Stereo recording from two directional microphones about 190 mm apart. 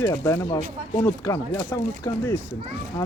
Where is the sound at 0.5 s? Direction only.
15° left (ahead or behind).